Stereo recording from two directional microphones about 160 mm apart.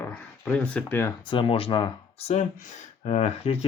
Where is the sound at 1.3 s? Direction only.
35° left (ahead or behind).